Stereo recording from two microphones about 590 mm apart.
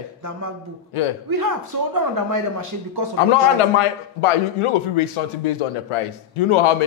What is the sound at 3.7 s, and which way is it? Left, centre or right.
A man's voice, left.